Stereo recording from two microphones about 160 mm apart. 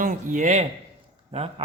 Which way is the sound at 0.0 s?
55° right (ahead or behind).